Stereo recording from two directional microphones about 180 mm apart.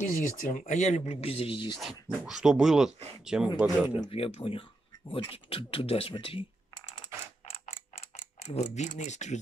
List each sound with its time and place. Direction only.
0.0 s speech: 45° left (ahead or behind); by 1.8 s 30° left (ahead or behind)
1.8 s speech: centre (ahead or behind)
4.0 s speech: 30° left (ahead or behind)
7.4 s a sound: 35° left (ahead or behind)